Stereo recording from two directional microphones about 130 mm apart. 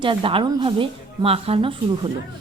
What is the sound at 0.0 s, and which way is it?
Speech, 40° right (ahead or behind).